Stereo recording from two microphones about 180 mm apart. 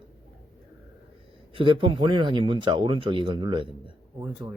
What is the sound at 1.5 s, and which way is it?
Speech, 30° right (ahead or behind).